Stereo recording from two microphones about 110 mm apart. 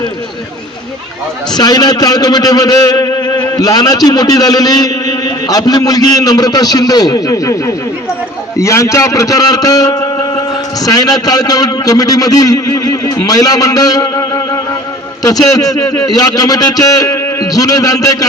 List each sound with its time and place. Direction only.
1.5 s a man's voice: 35° left (ahead or behind)